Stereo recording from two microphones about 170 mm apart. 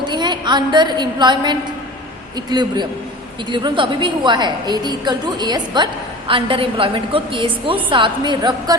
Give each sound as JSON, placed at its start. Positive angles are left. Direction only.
{"t": 0.0, "sound": "a woman's voice", "side_deg": -25}